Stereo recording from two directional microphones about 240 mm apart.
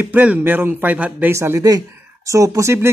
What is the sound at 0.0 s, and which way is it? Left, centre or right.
Speech, centre.